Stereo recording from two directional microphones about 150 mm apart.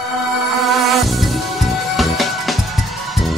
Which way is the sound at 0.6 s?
Centre (ahead or behind).